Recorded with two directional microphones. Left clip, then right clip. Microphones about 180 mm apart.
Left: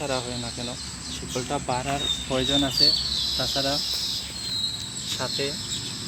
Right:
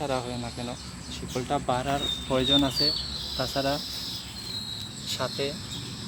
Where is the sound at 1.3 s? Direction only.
15° right (ahead or behind).